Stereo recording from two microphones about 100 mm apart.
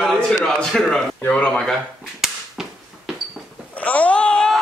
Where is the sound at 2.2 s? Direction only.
5° right (ahead or behind).